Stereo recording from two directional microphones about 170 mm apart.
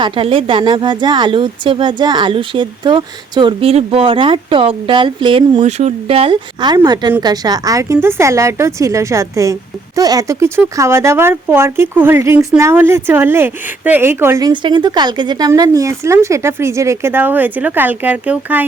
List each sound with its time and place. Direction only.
0.0 s a woman's voice: 30° right (ahead or behind); by 18.6 s 10° right (ahead or behind)